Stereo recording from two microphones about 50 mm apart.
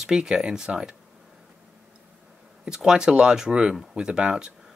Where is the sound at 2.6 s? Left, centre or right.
Centre.